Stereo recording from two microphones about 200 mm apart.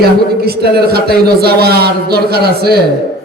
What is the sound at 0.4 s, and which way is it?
Speech, 50° right (ahead or behind).